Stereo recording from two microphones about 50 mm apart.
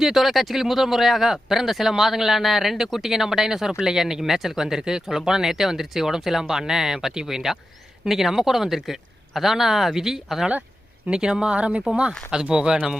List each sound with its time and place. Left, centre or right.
0.0 s speech: centre
11.1 s speech: centre